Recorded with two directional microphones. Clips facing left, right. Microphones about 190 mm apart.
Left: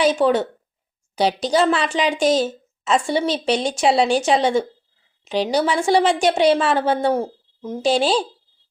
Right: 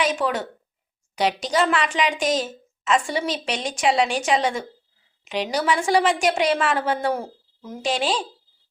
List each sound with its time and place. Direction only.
0.0 s a woman's voice: 30° left (ahead or behind)